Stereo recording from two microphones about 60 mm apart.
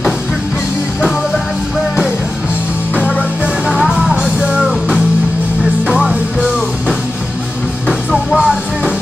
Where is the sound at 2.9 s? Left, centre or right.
Left.